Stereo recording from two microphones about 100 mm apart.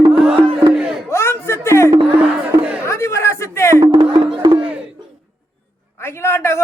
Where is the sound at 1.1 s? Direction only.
25° left (ahead or behind).